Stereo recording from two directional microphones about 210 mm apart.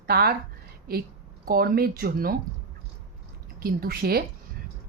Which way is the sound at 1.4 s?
45° right (ahead or behind).